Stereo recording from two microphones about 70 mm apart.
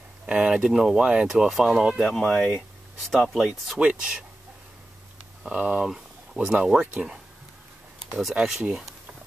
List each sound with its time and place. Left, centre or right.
0.3 s speech: centre
2.0 s speech: centre
3.0 s speech: centre
3.8 s speech: centre
5.4 s speech: centre
5.9 s speech: centre
8.2 s speech: centre